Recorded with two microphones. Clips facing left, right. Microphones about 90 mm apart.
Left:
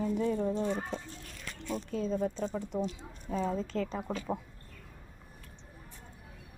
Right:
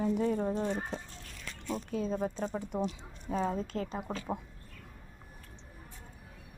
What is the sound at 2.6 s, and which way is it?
Speech, 15° right (ahead or behind).